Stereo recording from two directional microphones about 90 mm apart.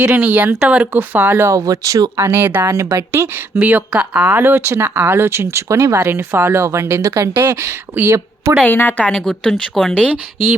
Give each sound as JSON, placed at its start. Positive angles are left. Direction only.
{"t": 0.2, "sound": "speech", "side_deg": -15}
{"t": 1.5, "sound": "speech", "side_deg": -40}
{"t": 2.6, "sound": "speech", "side_deg": -35}
{"t": 3.6, "sound": "speech", "side_deg": -15}
{"t": 8.6, "sound": "a woman's voice", "side_deg": 20}
{"t": 9.1, "sound": "speech", "side_deg": 5}